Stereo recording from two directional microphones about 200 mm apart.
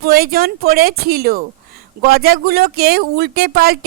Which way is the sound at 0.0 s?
50° right (ahead or behind).